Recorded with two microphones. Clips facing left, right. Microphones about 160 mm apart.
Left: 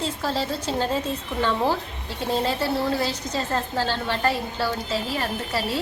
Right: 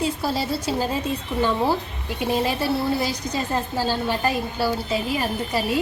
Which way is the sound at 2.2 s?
10° right (ahead or behind).